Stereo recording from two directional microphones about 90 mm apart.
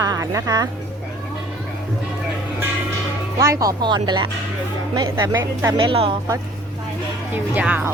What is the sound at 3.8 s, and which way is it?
Speech, 55° right (ahead or behind).